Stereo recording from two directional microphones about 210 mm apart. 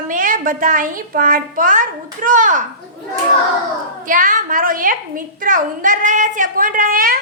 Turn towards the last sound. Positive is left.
turn(degrees=-40)  # may be behind; listen again after turning